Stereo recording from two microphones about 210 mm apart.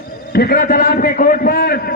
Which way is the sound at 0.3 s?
45° left (ahead or behind).